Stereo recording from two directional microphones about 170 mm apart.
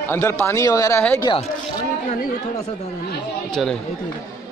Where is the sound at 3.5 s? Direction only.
5° left (ahead or behind).